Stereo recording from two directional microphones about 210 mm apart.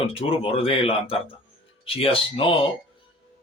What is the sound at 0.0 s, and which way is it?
Speech, 25° left (ahead or behind).